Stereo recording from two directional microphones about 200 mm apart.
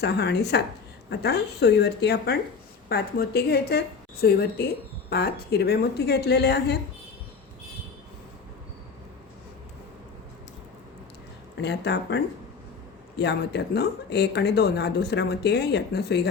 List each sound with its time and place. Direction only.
0.0 s a woman's voice: 55° left (ahead or behind)
11.6 s speech: 55° left (ahead or behind)